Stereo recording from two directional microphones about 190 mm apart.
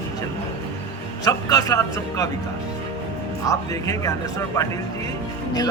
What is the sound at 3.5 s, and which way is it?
A man's voice, 15° left (ahead or behind).